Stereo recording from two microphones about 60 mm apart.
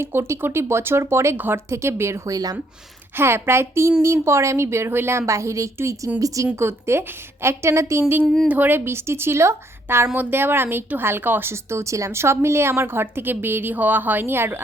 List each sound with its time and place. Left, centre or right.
0.0 s a woman's voice: right
1.4 s speech: right
1.7 s a woman's voice: right
2.3 s speech: right
3.2 s a woman's voice: right
6.1 s a woman's voice: right
6.6 s a woman's voice: right
8.4 s a woman's voice: right
10.2 s speech: right